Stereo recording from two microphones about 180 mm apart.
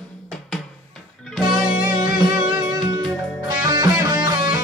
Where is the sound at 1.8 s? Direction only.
15° right (ahead or behind).